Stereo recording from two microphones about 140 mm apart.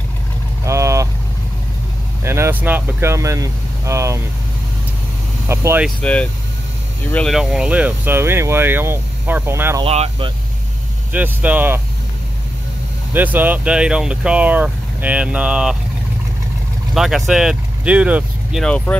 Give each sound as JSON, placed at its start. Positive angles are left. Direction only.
{"t": 0.7, "sound": "vehicle", "side_deg": -20}
{"t": 2.2, "sound": "speech", "side_deg": -20}
{"t": 5.5, "sound": "speech", "side_deg": -20}
{"t": 5.9, "sound": "speech", "side_deg": 10}
{"t": 7.3, "sound": "speech", "side_deg": -5}
{"t": 9.8, "sound": "speech", "side_deg": -45}
{"t": 11.1, "sound": "speech", "side_deg": -10}
{"t": 13.1, "sound": "speech", "side_deg": -15}
{"t": 16.9, "sound": "speech", "side_deg": -5}
{"t": 18.6, "sound": "speech", "side_deg": 5}